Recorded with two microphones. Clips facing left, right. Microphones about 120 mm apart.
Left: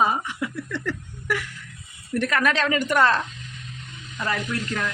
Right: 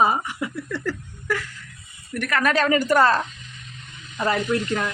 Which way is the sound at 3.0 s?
5° right (ahead or behind).